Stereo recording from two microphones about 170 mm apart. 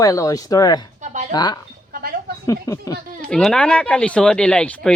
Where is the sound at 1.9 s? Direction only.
60° right (ahead or behind).